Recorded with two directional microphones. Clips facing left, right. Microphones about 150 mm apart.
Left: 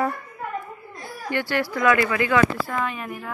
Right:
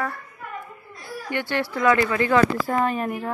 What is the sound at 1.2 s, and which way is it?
Speech, 20° right (ahead or behind).